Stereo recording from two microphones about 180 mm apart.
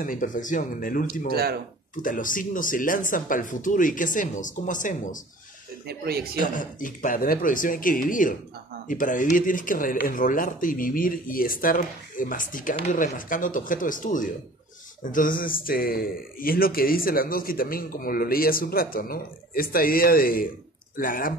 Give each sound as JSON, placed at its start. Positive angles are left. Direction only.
{"t": 0.0, "sound": "speech", "side_deg": 45}
{"t": 1.3, "sound": "speech", "side_deg": -60}
{"t": 2.0, "sound": "speech", "side_deg": 50}
{"t": 5.9, "sound": "speech", "side_deg": -60}
{"t": 6.4, "sound": "speech", "side_deg": 45}